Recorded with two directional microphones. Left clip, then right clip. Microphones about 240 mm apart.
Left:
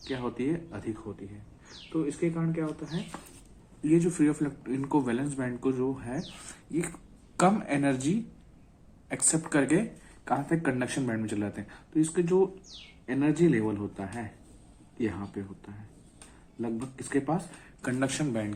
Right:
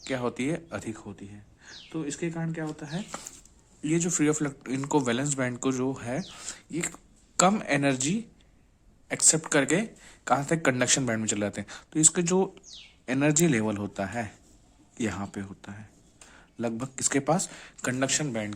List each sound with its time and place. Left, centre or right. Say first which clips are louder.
0.0 s a man's voice: right 3 dB; right
1.9 s a man's voice: left 3 dB; right
3.8 s a man's voice: left 1 dB; right
17.8 s speech: right 2 dB; right